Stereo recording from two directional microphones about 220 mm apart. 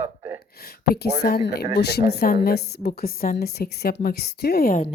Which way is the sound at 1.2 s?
45° left (ahead or behind).